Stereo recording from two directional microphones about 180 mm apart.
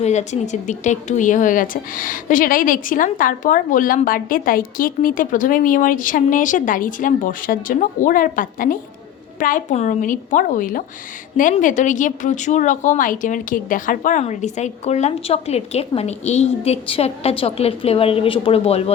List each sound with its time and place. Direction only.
0.0 s a woman's voice: 40° left (ahead or behind)